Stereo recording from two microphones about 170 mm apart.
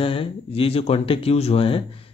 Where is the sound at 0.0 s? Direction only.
30° left (ahead or behind).